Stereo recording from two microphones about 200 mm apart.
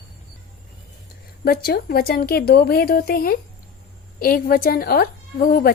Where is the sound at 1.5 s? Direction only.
50° left (ahead or behind).